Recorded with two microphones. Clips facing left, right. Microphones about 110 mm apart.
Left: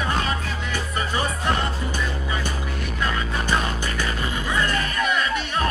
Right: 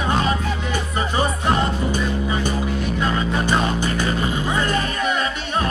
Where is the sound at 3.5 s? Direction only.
25° right (ahead or behind).